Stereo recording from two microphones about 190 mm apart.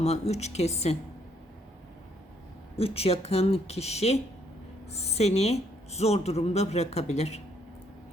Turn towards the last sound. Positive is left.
turn(degrees=35)  # may be behind; listen again after turning